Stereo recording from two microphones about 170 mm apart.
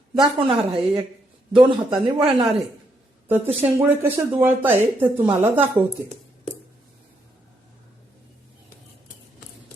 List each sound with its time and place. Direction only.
0.1 s speech: 30° right (ahead or behind)
3.2 s a woman's voice: 10° right (ahead or behind)